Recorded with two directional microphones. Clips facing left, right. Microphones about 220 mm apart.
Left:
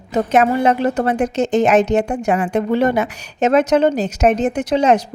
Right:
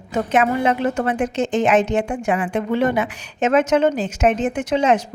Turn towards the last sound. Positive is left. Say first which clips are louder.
# left 3 dB
turn(degrees=40)  # may be behind; listen again after turning